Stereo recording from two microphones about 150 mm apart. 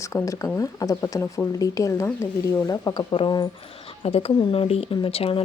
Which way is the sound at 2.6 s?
25° left (ahead or behind).